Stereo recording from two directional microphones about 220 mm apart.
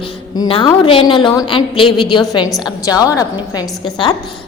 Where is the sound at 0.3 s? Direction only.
20° left (ahead or behind).